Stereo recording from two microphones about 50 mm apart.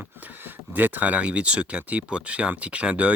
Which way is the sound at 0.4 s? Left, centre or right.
Right.